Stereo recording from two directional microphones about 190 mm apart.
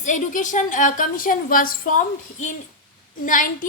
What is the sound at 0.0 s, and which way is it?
A woman's voice, 40° left (ahead or behind).